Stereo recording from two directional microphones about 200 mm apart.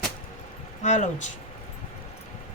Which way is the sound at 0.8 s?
35° left (ahead or behind).